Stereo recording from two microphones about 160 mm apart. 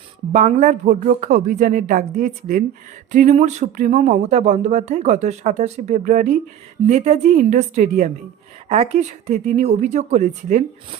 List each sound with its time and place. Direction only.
0.3 s speech: 45° right (ahead or behind)